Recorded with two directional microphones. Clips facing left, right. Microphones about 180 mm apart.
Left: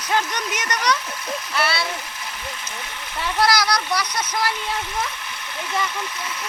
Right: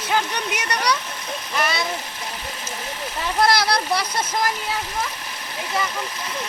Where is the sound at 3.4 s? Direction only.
25° right (ahead or behind).